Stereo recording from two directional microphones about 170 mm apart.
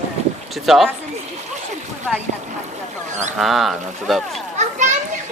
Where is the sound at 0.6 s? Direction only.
Centre (ahead or behind).